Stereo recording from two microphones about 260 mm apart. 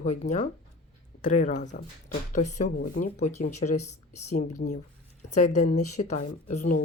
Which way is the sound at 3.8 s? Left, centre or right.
Left.